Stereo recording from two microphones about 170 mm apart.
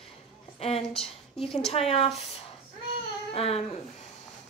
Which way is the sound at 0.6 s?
35° left (ahead or behind).